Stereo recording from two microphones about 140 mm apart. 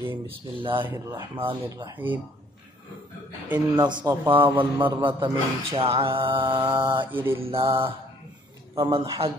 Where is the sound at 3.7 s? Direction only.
30° right (ahead or behind).